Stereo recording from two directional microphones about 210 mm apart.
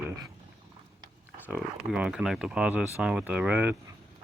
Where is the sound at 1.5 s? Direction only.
5° right (ahead or behind).